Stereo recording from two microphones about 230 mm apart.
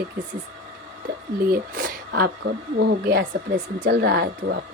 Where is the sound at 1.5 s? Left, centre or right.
Right.